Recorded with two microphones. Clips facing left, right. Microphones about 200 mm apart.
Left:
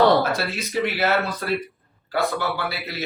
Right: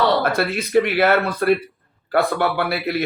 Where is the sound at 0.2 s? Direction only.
55° right (ahead or behind).